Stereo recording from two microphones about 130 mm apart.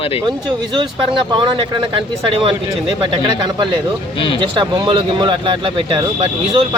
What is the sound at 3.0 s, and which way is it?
Speech, 35° right (ahead or behind).